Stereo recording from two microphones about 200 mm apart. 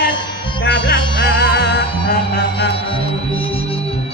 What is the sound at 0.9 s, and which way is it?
Music, 55° left (ahead or behind).